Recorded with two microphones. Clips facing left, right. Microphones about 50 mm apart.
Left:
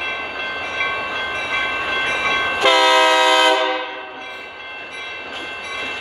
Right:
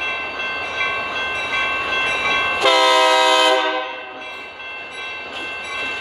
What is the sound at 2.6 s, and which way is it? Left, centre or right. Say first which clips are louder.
Train: left 1 dB; left.